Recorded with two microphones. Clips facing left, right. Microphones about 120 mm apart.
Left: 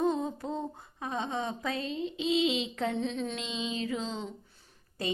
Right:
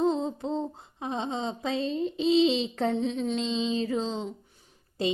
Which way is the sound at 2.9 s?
15° right (ahead or behind).